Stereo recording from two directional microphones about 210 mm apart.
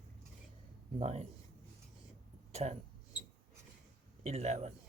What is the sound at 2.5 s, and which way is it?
Speech, 30° right (ahead or behind).